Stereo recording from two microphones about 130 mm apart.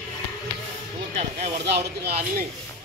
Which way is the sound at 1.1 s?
55° right (ahead or behind).